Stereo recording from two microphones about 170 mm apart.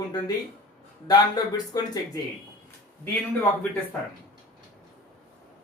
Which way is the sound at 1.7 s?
20° left (ahead or behind).